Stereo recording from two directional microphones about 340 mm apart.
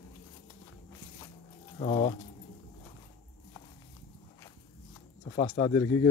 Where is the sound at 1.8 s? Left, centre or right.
Centre.